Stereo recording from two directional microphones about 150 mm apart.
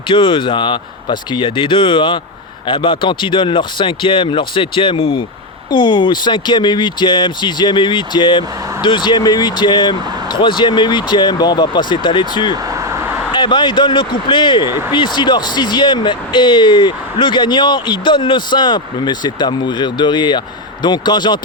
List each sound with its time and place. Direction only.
0.1 s speech: 35° left (ahead or behind)